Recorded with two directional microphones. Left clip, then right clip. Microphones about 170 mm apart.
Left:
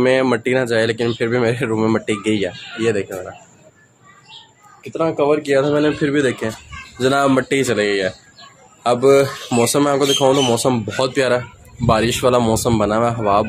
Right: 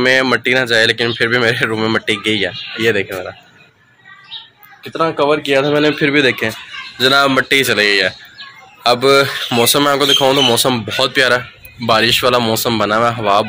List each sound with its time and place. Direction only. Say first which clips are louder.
0.0 s speech: right 3 dB; 10° left (ahead or behind)
2.8 s speech: right 4 dB; 15° right (ahead or behind)
4.9 s speech: right 2 dB; 10° right (ahead or behind)
7.0 s speech: right 4 dB; 15° left (ahead or behind)